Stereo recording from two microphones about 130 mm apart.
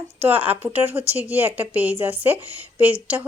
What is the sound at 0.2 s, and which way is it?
Speech, 15° right (ahead or behind).